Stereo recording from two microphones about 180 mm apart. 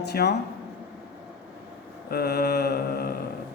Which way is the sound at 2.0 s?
60° left (ahead or behind).